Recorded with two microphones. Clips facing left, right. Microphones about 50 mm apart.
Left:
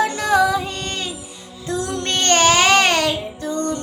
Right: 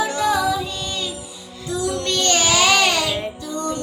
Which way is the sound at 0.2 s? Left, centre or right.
Left.